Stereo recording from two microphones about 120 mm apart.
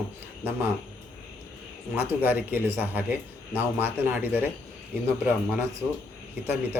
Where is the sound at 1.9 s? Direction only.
15° right (ahead or behind).